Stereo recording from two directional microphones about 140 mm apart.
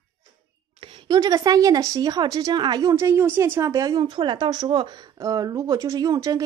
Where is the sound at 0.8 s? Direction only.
35° right (ahead or behind).